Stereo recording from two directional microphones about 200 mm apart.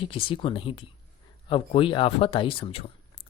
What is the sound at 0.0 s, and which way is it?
Speech, 25° left (ahead or behind).